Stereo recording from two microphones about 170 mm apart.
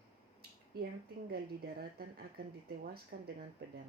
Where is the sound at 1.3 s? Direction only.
65° right (ahead or behind).